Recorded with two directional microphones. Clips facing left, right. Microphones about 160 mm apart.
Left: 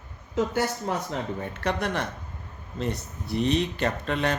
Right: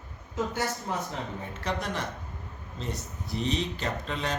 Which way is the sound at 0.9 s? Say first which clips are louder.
Left 4 dB; 75° left (ahead or behind).